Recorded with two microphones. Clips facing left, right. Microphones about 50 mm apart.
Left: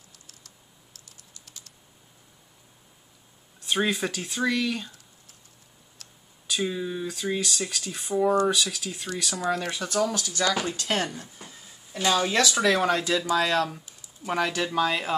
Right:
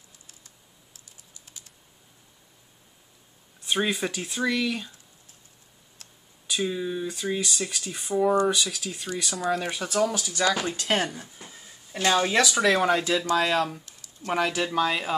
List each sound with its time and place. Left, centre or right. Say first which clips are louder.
0.9 s typing: left 2 dB; right
3.6 s speech: even; centre
6.4 s speech: right 1 dB; centre
12.1 s speech: right 1 dB; centre
12.6 s speech: right 1 dB; centre
13.8 s a sound: even; centre
14.3 s speech: right 1 dB; centre